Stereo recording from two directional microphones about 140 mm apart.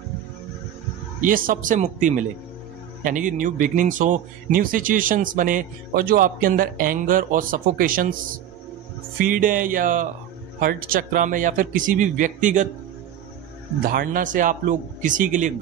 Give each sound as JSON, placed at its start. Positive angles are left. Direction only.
{"t": 1.2, "sound": "speech", "side_deg": -80}
{"t": 10.6, "sound": "speech", "side_deg": -90}
{"t": 13.8, "sound": "speech", "side_deg": -90}